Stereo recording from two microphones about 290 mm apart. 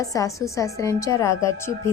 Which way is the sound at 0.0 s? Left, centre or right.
Centre.